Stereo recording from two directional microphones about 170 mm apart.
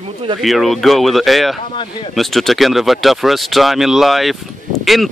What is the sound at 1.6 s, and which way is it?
Speech, 30° left (ahead or behind).